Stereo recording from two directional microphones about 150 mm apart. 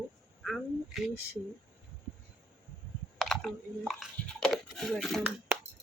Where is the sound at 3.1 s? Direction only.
Centre (ahead or behind).